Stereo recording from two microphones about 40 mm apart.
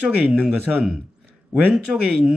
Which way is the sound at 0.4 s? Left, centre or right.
Centre.